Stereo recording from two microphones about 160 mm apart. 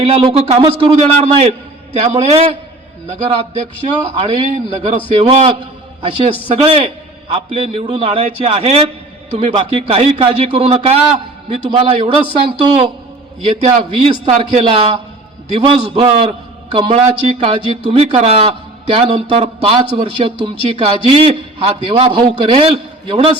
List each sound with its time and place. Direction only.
0.0 s a man's voice: 35° right (ahead or behind)
6.0 s a man's voice: 35° right (ahead or behind)